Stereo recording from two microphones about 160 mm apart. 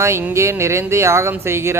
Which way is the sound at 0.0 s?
15° right (ahead or behind).